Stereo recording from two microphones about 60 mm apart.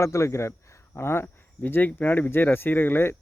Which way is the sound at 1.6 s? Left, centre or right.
Left.